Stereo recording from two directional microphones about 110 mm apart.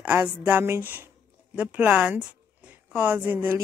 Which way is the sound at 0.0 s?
20° right (ahead or behind).